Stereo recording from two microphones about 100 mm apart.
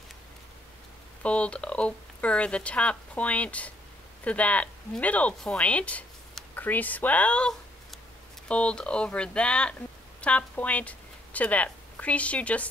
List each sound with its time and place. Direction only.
1.2 s speech: 10° left (ahead or behind)